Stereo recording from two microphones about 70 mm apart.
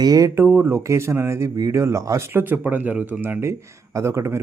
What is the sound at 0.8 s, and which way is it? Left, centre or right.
Speech, right.